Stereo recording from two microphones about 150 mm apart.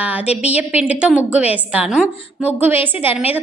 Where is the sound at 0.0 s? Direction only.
10° right (ahead or behind).